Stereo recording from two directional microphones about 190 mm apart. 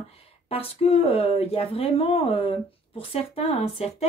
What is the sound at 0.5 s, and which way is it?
A woman's voice, 30° left (ahead or behind).